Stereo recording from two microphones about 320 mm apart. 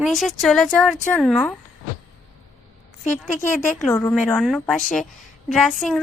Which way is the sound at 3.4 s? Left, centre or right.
Left.